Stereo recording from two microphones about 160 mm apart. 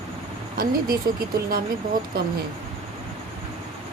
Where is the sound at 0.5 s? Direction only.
65° right (ahead or behind).